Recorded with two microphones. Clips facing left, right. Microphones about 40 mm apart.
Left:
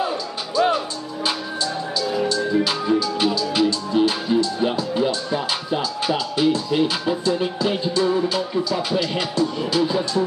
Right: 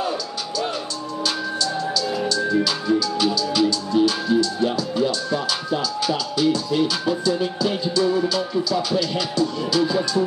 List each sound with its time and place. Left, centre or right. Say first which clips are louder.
1.2 s music: even; centre